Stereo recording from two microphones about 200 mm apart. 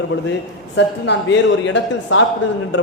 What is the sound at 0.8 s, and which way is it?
A man's voice, 60° left (ahead or behind).